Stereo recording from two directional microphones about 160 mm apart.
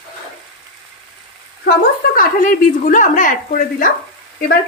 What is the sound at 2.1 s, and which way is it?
Speech, 60° left (ahead or behind).